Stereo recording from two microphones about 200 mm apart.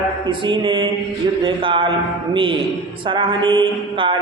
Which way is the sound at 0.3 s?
25° right (ahead or behind).